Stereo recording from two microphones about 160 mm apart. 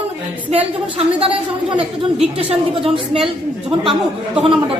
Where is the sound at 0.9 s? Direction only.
35° right (ahead or behind).